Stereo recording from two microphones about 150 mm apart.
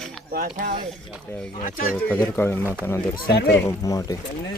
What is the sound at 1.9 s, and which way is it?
Speech, 10° left (ahead or behind).